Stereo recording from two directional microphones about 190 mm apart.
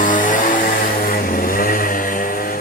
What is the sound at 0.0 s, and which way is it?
Music, 45° left (ahead or behind).